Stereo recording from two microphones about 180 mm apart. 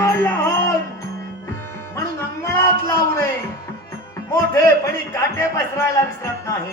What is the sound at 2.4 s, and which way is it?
Music, 15° left (ahead or behind).